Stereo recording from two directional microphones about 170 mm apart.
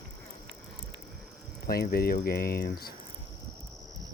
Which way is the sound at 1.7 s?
65° left (ahead or behind).